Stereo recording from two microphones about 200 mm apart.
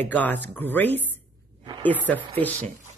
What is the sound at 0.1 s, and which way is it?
Speech, 10° left (ahead or behind).